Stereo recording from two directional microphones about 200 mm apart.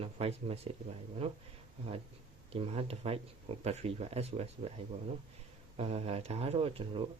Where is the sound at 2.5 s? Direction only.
30° right (ahead or behind).